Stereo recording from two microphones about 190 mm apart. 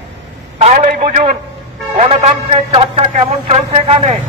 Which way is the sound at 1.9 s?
35° right (ahead or behind).